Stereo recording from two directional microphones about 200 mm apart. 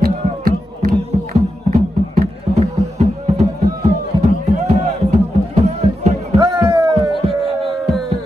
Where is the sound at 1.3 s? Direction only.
35° right (ahead or behind).